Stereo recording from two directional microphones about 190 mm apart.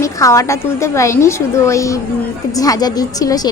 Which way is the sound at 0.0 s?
15° left (ahead or behind).